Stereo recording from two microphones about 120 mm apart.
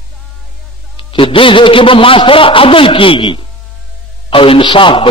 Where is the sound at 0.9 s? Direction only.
45° left (ahead or behind).